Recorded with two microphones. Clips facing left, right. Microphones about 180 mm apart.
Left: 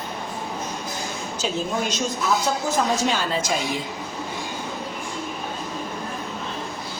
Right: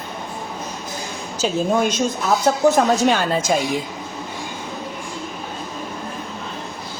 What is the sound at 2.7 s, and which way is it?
Speech, 55° right (ahead or behind).